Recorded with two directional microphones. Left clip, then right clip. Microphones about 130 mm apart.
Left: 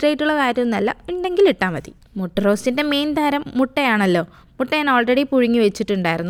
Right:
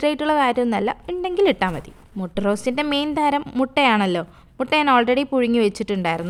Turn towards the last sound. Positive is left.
turn(degrees=40)  # may be behind; listen again after turning